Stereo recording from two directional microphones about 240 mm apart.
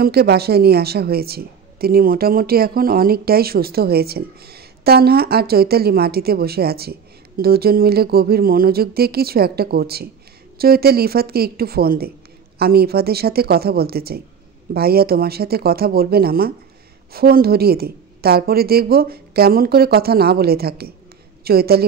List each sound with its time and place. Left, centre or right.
0.0 s a woman's voice: right